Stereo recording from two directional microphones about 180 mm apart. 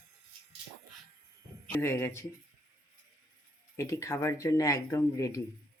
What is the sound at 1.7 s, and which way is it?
Speech, 15° left (ahead or behind).